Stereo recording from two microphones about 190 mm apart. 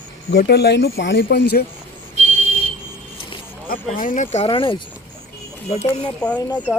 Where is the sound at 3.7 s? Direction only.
45° left (ahead or behind); by 4.8 s 25° left (ahead or behind).